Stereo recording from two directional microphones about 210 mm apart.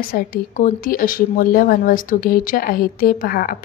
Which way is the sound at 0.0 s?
45° left (ahead or behind).